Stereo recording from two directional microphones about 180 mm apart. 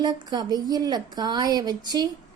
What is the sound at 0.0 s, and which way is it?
Speech, 25° right (ahead or behind).